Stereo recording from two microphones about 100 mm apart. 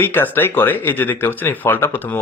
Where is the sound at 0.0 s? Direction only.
20° left (ahead or behind).